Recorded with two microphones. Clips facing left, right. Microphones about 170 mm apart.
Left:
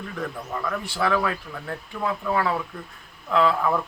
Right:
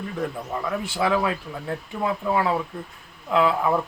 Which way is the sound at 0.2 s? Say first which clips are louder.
Right 2 dB; 15° right (ahead or behind).